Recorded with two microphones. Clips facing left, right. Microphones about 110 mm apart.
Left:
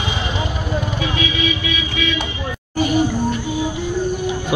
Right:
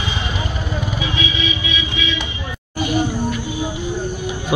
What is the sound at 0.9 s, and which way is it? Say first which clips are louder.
Vehicle: left 1 dB; 50° left (ahead or behind).